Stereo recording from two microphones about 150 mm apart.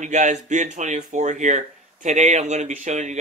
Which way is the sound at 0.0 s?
50° right (ahead or behind).